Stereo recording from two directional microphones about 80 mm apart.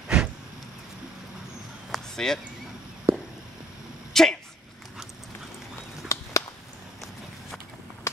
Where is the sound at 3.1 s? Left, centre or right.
Right.